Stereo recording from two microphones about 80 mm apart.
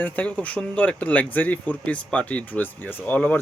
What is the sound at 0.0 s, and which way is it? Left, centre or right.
Speech, centre.